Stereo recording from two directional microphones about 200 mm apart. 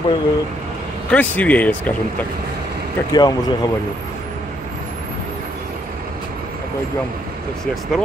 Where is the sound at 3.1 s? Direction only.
20° left (ahead or behind).